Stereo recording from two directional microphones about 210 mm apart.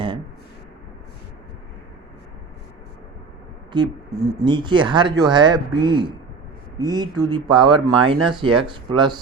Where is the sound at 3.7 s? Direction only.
15° right (ahead or behind).